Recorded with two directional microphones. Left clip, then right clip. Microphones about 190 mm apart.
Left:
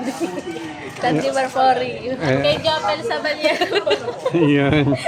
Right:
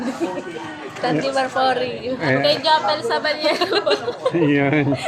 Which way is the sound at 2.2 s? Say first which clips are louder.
Even; 30° left (ahead or behind).